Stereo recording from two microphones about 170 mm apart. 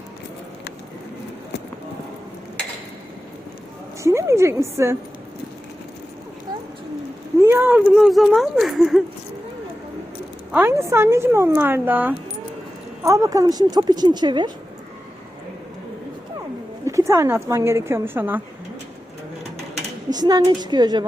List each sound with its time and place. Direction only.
4.0 s a woman's voice: 15° right (ahead or behind)
7.4 s a sound: 15° right (ahead or behind)
7.9 s speech: centre (ahead or behind)
10.5 s a woman's voice: 15° right (ahead or behind)
16.8 s a woman's voice: 15° right (ahead or behind)
20.1 s a woman's voice: 25° right (ahead or behind)